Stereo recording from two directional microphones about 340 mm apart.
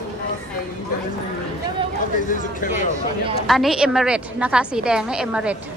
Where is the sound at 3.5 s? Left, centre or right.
Centre.